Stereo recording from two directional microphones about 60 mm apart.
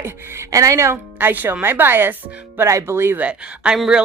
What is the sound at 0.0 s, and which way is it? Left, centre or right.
Speech, right.